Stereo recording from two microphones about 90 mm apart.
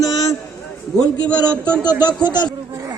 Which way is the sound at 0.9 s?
10° left (ahead or behind).